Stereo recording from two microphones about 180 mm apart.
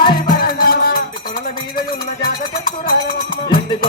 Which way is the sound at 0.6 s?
55° left (ahead or behind).